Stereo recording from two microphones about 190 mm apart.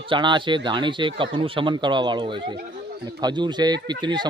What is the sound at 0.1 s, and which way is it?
Speech, 25° right (ahead or behind).